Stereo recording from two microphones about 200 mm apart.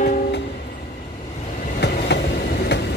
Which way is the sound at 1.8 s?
60° left (ahead or behind).